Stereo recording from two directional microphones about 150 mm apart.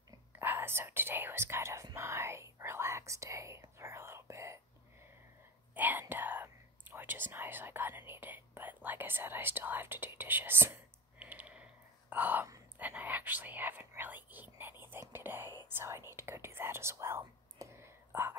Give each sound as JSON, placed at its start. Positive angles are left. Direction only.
{"t": 0.4, "sound": "whispering", "side_deg": -15}
{"t": 5.8, "sound": "whispering", "side_deg": -10}